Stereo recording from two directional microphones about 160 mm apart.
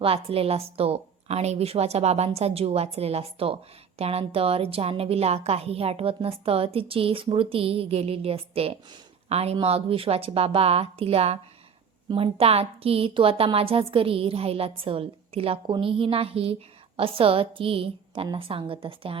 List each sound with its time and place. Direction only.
0.0 s a woman's voice: 35° right (ahead or behind)